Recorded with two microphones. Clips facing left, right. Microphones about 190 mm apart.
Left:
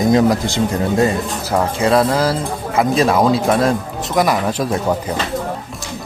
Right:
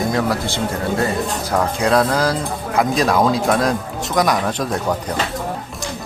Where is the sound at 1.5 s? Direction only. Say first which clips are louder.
Left 2 dB; 5° left (ahead or behind).